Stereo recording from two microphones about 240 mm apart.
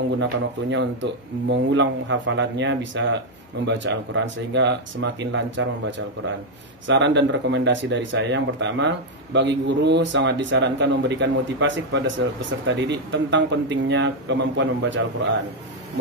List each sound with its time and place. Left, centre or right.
0.2 s speech: right